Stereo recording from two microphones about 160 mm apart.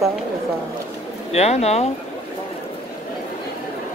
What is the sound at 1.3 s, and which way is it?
Speech, 40° left (ahead or behind).